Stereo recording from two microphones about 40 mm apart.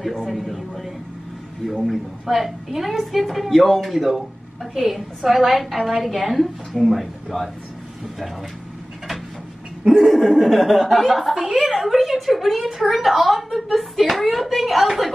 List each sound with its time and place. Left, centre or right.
0.2 s a man's voice: centre
1.9 s a woman's voice: centre
9.9 s a woman's voice: centre